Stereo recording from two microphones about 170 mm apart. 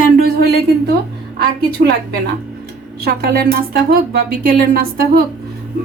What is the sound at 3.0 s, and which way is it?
A woman's voice, 65° right (ahead or behind).